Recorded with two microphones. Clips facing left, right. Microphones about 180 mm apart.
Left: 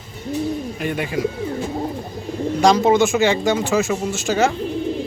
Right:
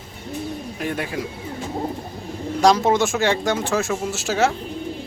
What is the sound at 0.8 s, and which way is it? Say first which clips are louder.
Speech: even; centre (ahead or behind).